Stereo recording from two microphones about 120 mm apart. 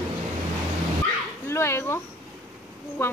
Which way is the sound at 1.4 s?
20° left (ahead or behind).